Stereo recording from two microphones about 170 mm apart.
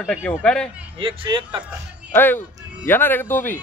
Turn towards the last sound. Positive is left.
turn(degrees=10)  # may be behind; listen again after turning